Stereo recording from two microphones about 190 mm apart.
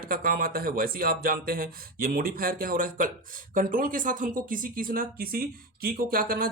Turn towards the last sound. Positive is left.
turn(degrees=-50)  # may be behind; listen again after turning